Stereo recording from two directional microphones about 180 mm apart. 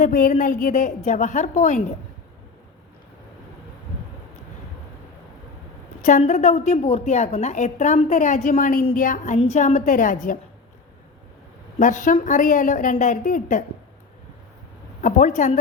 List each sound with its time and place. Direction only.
0.0 s a woman's voice: 50° left (ahead or behind)
6.0 s a woman's voice: 45° left (ahead or behind)
11.8 s a woman's voice: 45° left (ahead or behind)
15.0 s a woman's voice: 45° left (ahead or behind)